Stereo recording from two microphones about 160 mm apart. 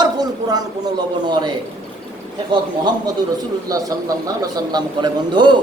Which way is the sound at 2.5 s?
30° right (ahead or behind).